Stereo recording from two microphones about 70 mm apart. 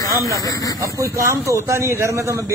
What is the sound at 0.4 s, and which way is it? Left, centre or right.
Speech, left.